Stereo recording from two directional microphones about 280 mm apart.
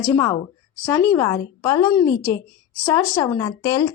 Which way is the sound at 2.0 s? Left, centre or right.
Left.